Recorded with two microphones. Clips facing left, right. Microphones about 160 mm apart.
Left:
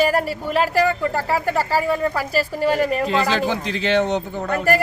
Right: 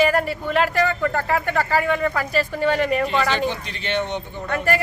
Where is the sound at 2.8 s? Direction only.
40° left (ahead or behind).